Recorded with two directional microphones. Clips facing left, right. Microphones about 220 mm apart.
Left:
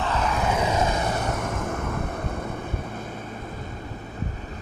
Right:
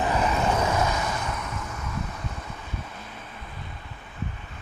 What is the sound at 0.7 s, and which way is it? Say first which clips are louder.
Vehicle: left 2 dB; 30° left (ahead or behind).